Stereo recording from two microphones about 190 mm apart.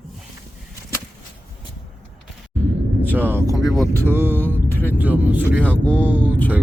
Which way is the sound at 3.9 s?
10° right (ahead or behind).